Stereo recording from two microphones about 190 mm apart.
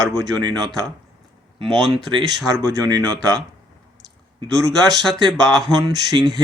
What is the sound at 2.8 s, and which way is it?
Speech, 20° right (ahead or behind).